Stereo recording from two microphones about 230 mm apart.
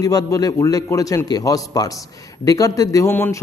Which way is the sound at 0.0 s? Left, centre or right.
Centre.